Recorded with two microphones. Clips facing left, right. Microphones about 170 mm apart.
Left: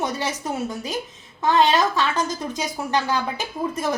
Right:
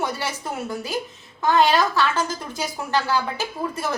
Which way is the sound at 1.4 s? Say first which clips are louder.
Even; 20° left (ahead or behind).